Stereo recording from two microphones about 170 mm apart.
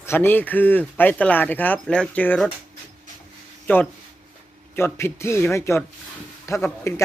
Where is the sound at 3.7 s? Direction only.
10° left (ahead or behind).